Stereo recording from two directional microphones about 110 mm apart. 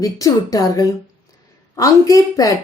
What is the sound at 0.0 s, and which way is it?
A woman's voice, 35° left (ahead or behind).